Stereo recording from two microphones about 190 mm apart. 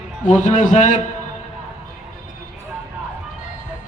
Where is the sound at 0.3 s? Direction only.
40° left (ahead or behind).